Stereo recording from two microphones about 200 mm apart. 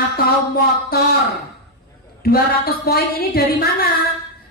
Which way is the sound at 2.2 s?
50° left (ahead or behind).